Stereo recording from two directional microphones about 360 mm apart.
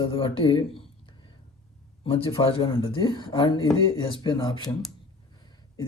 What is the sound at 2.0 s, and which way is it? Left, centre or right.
Speech, centre.